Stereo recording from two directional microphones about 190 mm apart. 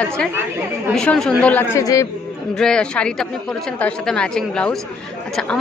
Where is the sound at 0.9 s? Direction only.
5° left (ahead or behind).